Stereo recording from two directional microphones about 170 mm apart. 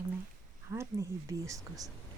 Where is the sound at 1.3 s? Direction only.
20° right (ahead or behind).